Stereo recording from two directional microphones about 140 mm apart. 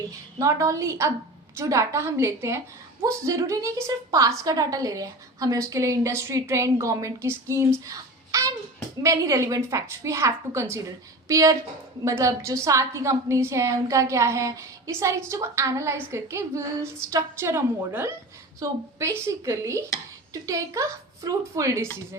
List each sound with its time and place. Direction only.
0.3 s a woman's voice: 20° right (ahead or behind)
7.9 s a sound: 25° right (ahead or behind)
9.0 s a woman's voice: 25° right (ahead or behind)